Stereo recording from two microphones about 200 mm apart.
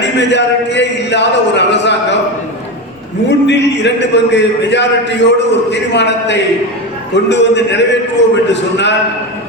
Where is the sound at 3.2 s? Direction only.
60° left (ahead or behind).